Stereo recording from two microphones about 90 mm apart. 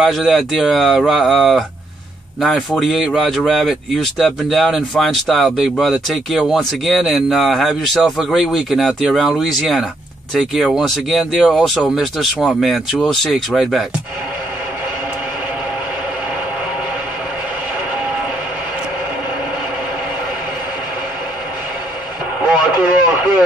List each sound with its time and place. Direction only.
0.0 s speech: centre (ahead or behind)
22.5 s radio: 25° right (ahead or behind)